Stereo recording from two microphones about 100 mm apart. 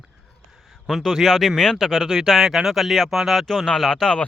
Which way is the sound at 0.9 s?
Centre (ahead or behind).